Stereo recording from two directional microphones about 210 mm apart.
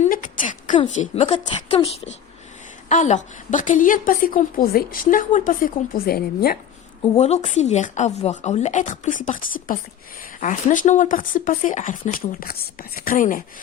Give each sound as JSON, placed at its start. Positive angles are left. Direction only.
{"t": 0.0, "sound": "a sound", "side_deg": 40}
{"t": 0.7, "sound": "a woman's voice", "side_deg": 30}
{"t": 7.2, "sound": "a woman's voice", "side_deg": 30}